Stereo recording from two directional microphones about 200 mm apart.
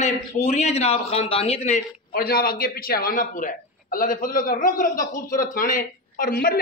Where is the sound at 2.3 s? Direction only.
45° left (ahead or behind).